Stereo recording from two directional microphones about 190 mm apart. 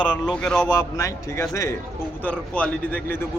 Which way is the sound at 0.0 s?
5° left (ahead or behind).